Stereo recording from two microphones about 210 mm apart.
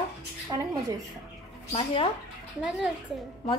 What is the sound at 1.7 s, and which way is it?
Speech, 25° left (ahead or behind).